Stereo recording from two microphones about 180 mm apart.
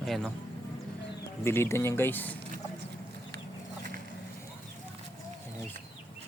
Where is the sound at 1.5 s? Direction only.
15° left (ahead or behind).